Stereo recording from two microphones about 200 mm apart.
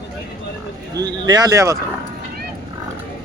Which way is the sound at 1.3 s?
20° right (ahead or behind).